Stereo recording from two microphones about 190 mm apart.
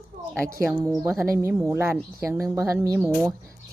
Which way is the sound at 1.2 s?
10° right (ahead or behind).